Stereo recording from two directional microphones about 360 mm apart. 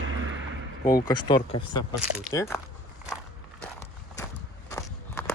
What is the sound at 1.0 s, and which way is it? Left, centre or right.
Speech, centre.